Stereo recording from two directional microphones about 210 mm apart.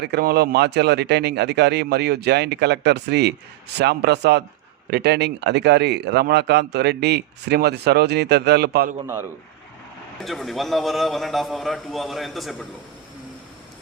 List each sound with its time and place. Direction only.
0.0 s speech: 50° right (ahead or behind)
10.2 s a man's voice: centre (ahead or behind)